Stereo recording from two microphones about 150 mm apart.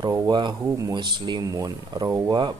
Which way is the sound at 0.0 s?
30° right (ahead or behind).